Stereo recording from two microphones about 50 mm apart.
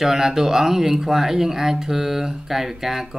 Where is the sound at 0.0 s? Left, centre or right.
Centre.